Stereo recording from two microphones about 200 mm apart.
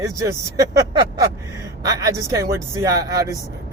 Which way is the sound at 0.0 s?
15° right (ahead or behind).